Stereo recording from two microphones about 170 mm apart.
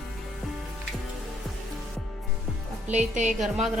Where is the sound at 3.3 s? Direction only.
Centre (ahead or behind).